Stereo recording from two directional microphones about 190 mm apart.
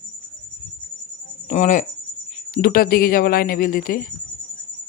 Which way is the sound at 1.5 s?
40° left (ahead or behind).